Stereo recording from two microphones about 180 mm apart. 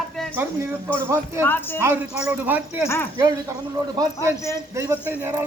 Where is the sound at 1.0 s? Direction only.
15° right (ahead or behind).